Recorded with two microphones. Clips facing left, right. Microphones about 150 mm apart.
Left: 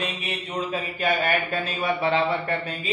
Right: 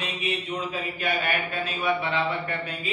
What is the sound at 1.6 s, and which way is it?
Speech, 35° left (ahead or behind).